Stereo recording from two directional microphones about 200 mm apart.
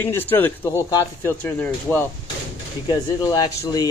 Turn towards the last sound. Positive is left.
turn(degrees=20)  # may be behind; listen again after turning